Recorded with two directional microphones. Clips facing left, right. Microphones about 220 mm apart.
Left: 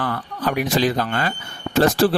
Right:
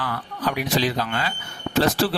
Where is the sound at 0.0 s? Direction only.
50° left (ahead or behind).